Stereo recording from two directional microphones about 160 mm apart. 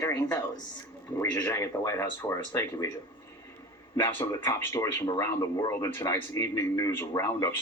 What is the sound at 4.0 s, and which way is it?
Speech, 15° left (ahead or behind).